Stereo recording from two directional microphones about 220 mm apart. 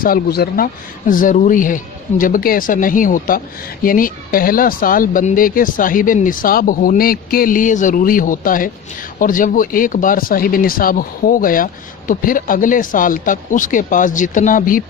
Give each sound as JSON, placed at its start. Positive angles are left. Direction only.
{"t": 0.0, "sound": "speech", "side_deg": 45}